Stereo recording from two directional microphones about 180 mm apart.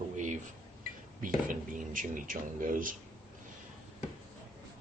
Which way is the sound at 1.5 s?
50° right (ahead or behind).